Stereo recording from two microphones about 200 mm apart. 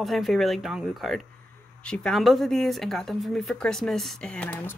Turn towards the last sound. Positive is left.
turn(degrees=10)  # may be behind; listen again after turning